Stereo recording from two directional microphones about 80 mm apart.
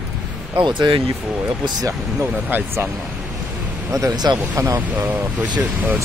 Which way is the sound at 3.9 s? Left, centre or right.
Right.